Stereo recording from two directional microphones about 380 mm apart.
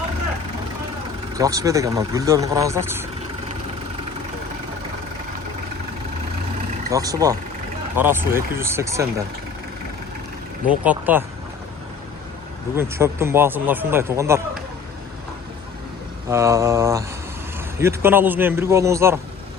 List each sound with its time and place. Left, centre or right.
1.4 s speech: centre
6.9 s speech: centre
10.8 s speech: centre
12.7 s speech: centre
16.3 s speech: centre